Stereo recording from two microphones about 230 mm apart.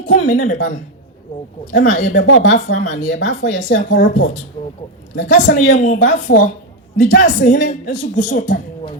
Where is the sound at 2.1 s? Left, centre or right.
Left.